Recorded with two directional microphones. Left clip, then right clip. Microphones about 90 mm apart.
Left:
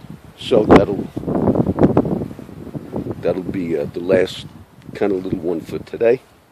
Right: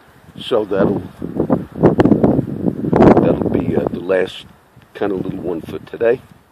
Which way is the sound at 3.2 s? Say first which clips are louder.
Right 5 dB; 20° left (ahead or behind).